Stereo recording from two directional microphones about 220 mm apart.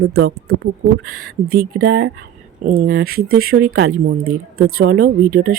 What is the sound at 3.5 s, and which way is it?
Speech, 70° right (ahead or behind).